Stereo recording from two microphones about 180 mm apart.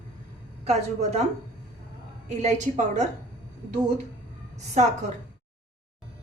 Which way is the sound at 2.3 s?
40° right (ahead or behind).